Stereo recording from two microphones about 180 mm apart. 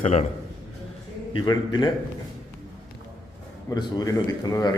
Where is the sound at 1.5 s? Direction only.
25° left (ahead or behind).